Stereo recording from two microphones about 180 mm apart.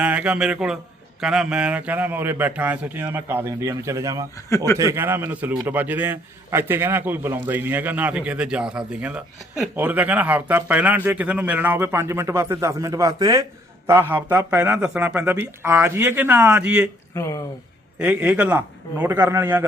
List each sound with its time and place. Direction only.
0.0 s a man's voice: 10° right (ahead or behind)
4.4 s speech: 15° left (ahead or behind)
4.8 s a man's voice: 15° right (ahead or behind)
17.2 s speech: 15° left (ahead or behind)
18.0 s a man's voice: 5° right (ahead or behind)